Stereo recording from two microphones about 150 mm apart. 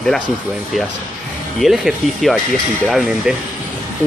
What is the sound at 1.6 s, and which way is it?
Speech, centre (ahead or behind).